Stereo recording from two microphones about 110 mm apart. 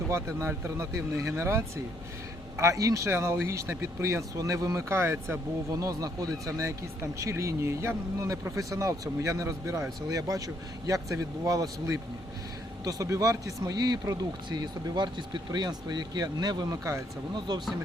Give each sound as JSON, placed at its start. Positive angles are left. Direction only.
{"t": 0.1, "sound": "speech", "side_deg": -25}
{"t": 5.7, "sound": "speech", "side_deg": -35}